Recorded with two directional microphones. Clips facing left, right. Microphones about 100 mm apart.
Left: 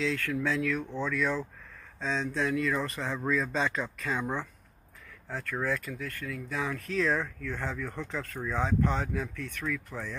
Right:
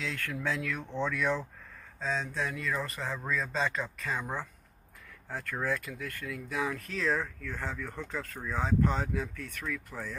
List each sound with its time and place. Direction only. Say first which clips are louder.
0.0 s speech: left 5 dB; 15° right (ahead or behind)
2.0 s speech: left 2 dB; 5° right (ahead or behind)